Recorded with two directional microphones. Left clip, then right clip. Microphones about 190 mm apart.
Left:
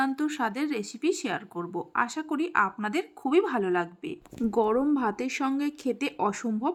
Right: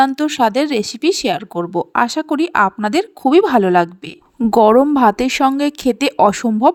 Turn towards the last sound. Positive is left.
turn(degrees=-45)  # may be behind; listen again after turning